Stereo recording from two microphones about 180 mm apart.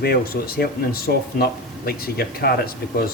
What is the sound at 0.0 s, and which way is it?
Speech, 60° left (ahead or behind).